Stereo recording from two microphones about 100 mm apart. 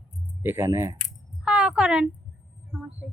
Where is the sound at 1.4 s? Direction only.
10° right (ahead or behind).